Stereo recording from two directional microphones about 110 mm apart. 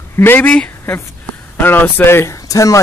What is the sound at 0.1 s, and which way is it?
Speech, 20° left (ahead or behind).